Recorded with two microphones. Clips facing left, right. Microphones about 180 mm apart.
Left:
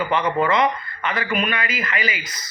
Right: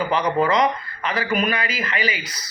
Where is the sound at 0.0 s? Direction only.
35° right (ahead or behind).